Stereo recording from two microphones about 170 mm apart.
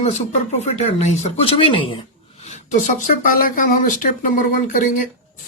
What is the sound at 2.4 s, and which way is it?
A man's voice, 45° left (ahead or behind).